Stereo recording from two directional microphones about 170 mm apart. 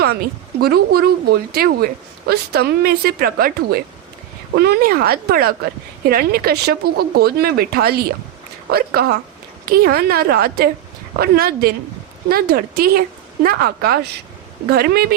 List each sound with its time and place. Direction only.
0.0 s speech: 70° right (ahead or behind)
4.5 s speech: 70° right (ahead or behind)